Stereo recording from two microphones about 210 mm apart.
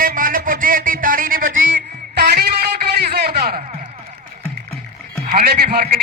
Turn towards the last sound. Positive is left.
turn(degrees=-45)  # may be behind; listen again after turning